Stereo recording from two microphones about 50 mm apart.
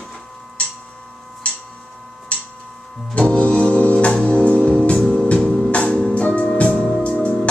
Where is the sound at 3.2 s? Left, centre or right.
Left.